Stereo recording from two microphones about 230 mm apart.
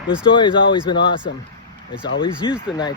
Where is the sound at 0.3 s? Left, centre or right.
Left.